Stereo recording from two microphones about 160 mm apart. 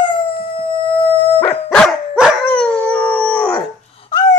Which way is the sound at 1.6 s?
Centre (ahead or behind).